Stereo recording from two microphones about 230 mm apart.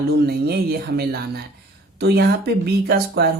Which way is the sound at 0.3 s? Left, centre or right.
Right.